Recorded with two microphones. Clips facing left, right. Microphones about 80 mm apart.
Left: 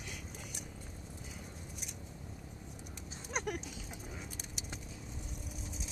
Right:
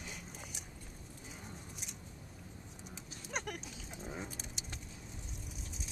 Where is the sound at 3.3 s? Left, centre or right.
Centre.